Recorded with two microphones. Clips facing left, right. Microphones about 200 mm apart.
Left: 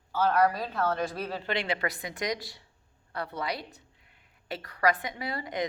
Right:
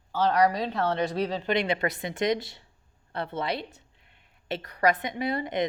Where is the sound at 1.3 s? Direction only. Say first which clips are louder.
Right 5 dB; 20° right (ahead or behind).